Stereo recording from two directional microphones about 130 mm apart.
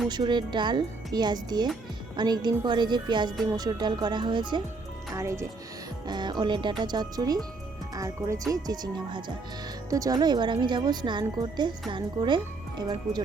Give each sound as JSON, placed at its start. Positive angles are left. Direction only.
{"t": 0.1, "sound": "speech", "side_deg": -35}
{"t": 5.1, "sound": "speech", "side_deg": -25}
{"t": 6.1, "sound": "speech", "side_deg": -35}